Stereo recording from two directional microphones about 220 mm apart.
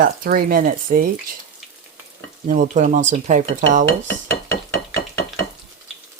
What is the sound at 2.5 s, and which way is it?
Speech, 35° right (ahead or behind).